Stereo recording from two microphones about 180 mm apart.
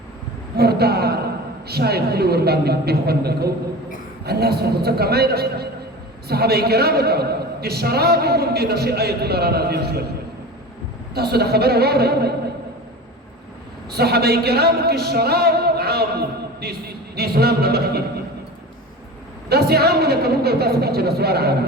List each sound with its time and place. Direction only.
0.5 s a sound: 60° right (ahead or behind)
1.6 s a man's voice: 60° right (ahead or behind)
11.1 s a man's voice: 60° right (ahead or behind)
13.9 s a man's voice: 60° right (ahead or behind)
19.5 s a man's voice: 60° right (ahead or behind)